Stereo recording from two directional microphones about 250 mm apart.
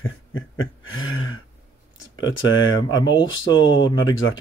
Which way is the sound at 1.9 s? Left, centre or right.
Left.